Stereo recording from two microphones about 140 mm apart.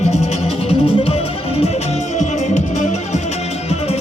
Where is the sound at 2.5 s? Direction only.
55° left (ahead or behind).